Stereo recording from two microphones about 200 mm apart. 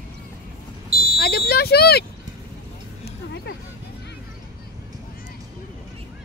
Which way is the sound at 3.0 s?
55° left (ahead or behind).